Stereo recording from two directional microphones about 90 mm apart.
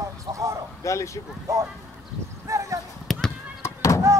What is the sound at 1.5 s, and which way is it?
Speech, 35° right (ahead or behind).